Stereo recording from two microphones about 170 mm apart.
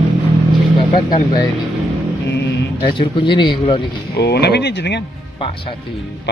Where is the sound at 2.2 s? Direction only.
90° left.